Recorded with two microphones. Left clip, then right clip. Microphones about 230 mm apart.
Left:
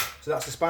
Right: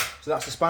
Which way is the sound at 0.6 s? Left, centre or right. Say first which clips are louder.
Right 2 dB; right.